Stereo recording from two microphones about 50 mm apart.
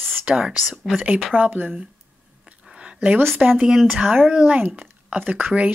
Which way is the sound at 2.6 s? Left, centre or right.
Centre.